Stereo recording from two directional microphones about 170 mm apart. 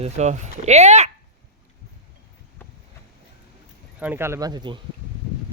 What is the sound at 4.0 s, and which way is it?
Speech, 10° right (ahead or behind).